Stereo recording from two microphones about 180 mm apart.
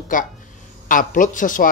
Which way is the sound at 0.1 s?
45° left (ahead or behind).